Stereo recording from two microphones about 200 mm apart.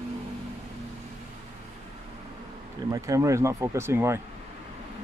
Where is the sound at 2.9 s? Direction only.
15° right (ahead or behind).